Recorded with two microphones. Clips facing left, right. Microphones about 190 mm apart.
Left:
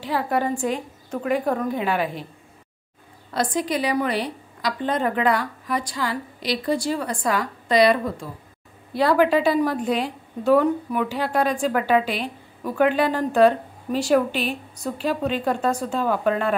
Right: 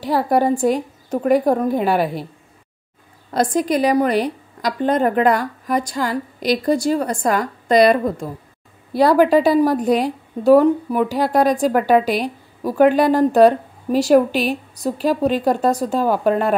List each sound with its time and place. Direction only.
0.0 s a woman's voice: 40° right (ahead or behind)
3.3 s a woman's voice: 45° right (ahead or behind)